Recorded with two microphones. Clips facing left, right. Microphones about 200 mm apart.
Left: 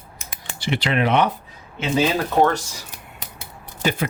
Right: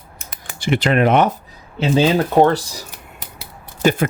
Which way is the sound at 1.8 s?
30° right (ahead or behind).